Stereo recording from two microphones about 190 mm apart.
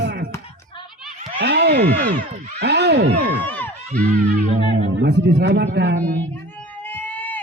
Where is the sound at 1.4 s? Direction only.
65° right (ahead or behind).